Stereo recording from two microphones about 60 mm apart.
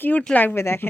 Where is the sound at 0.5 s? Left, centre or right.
Left.